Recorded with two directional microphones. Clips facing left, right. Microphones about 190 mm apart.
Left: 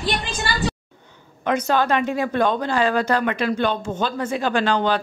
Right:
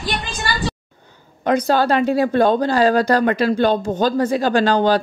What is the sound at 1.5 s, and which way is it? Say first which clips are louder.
Speech: right 4 dB; 35° right (ahead or behind).